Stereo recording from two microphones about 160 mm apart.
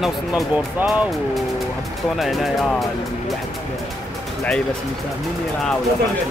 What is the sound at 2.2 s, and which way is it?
Speech, centre (ahead or behind).